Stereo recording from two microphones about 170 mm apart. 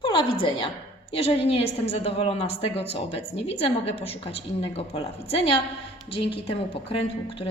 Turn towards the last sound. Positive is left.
turn(degrees=35)  # may be behind; listen again after turning